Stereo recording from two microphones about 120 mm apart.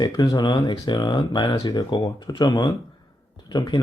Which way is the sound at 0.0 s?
30° left (ahead or behind).